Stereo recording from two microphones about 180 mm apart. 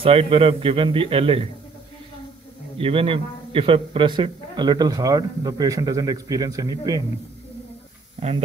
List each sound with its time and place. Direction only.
0.0 s a man's voice: 30° right (ahead or behind)
2.8 s a man's voice: 30° right (ahead or behind)